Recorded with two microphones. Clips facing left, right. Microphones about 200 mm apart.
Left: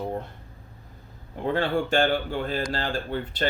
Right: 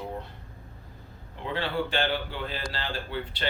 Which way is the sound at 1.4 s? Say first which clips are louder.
Left 5 dB; 45° left (ahead or behind).